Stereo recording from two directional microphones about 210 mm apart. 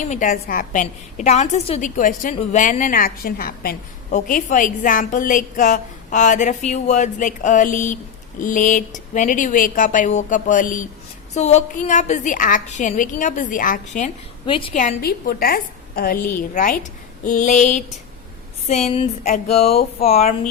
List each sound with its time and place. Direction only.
0.1 s a woman's voice: 40° left (ahead or behind)
14.4 s a woman's voice: 25° left (ahead or behind)
14.7 s a woman's voice: 35° left (ahead or behind)
18.9 s music: 30° left (ahead or behind)